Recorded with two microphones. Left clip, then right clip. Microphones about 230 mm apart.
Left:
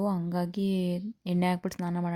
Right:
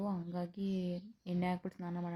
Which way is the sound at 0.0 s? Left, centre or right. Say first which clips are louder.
Left 10 dB; left.